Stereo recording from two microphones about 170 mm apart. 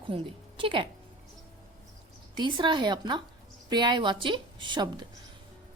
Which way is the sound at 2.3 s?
25° right (ahead or behind).